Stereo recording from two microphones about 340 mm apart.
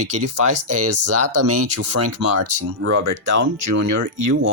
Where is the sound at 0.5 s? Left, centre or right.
Right.